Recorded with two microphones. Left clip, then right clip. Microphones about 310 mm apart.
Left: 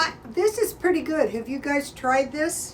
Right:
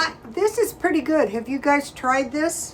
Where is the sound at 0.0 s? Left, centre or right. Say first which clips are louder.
Right 1 dB; centre.